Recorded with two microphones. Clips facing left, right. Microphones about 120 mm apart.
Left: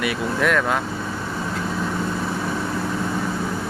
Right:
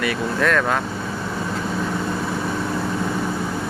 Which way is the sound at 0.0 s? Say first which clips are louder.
Right 1 dB; 15° left (ahead or behind).